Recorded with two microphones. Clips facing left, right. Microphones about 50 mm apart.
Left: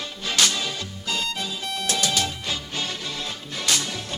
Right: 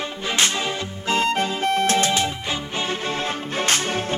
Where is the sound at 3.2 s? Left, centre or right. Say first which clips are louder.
Right 8 dB; right.